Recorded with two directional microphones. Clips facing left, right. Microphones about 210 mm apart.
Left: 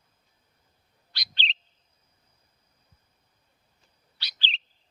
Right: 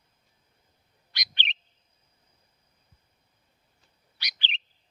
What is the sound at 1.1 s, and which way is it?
Bird, 20° right (ahead or behind).